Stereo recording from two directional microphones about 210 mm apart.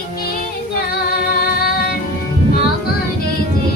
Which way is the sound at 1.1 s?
45° left (ahead or behind).